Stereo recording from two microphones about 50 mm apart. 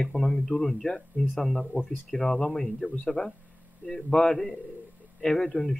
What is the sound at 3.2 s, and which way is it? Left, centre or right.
Speech, left.